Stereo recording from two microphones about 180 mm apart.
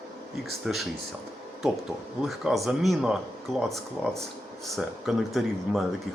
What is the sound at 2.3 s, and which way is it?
Speech, centre (ahead or behind).